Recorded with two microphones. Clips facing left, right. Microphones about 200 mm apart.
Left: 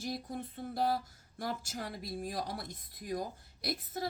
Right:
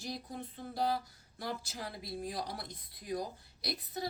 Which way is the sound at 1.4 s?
45° left (ahead or behind).